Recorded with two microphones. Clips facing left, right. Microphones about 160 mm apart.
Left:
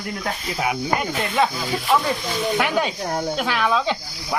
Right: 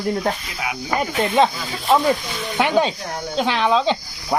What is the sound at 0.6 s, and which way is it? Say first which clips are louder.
Speech: left 4 dB; 40° left (ahead or behind).